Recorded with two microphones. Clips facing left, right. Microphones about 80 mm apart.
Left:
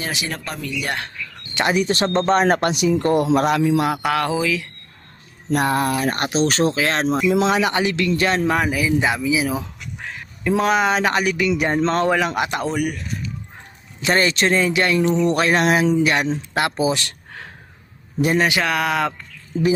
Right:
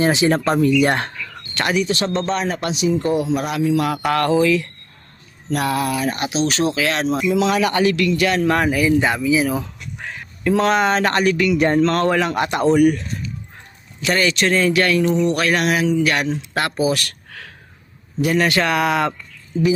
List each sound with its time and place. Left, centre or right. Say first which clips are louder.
0.0 s speech: right 11 dB; right
1.7 s speech: even; left
3.0 s speech: left 3 dB; left
3.9 s speech: right 3 dB; centre
5.5 s speech: left 1 dB; left
7.5 s speech: right 2 dB; left
8.4 s speech: right 3 dB; centre; by 12.0 s left
12.0 s speech: right 1 dB; centre
14.0 s speech: even; left; by 18.6 s centre
18.6 s speech: right 2 dB; centre
19.5 s speech: right 1 dB; left